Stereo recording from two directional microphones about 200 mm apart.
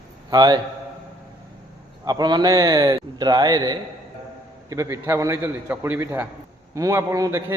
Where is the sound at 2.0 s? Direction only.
20° right (ahead or behind).